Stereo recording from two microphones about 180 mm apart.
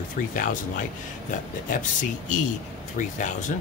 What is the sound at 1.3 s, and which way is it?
Speech, 45° left (ahead or behind).